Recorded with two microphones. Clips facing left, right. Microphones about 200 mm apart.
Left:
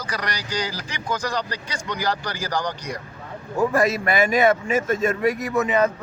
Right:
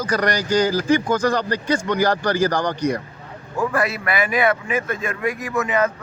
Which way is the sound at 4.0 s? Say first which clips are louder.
Left 2 dB; 25° left (ahead or behind).